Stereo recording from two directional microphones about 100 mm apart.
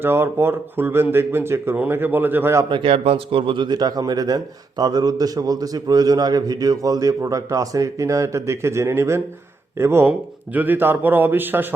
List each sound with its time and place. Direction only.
0.0 s speech: 20° right (ahead or behind)
2.6 s a man's voice: 60° right (ahead or behind); by 11.7 s 20° right (ahead or behind)